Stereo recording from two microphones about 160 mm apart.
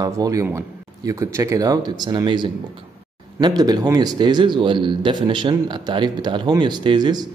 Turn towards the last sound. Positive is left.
turn(degrees=-25)  # may be behind; listen again after turning